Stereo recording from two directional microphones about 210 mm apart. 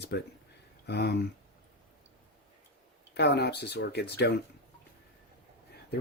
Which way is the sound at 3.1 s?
50° left (ahead or behind).